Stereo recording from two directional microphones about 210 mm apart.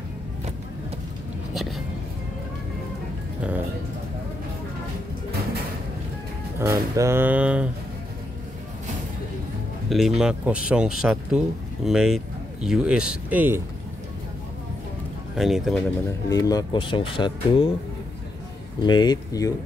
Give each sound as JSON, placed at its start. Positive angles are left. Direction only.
{"t": 1.5, "sound": "a sound", "side_deg": 0}
{"t": 6.6, "sound": "speech", "side_deg": -15}
{"t": 9.8, "sound": "speech", "side_deg": 0}
{"t": 15.3, "sound": "speech", "side_deg": 0}
{"t": 16.3, "sound": "speech", "side_deg": 15}
{"t": 18.9, "sound": "speech", "side_deg": 20}